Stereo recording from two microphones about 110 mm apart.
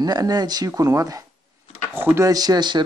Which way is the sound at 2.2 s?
35° right (ahead or behind).